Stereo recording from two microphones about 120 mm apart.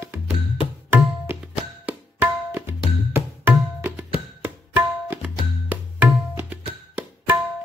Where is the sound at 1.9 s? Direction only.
15° right (ahead or behind).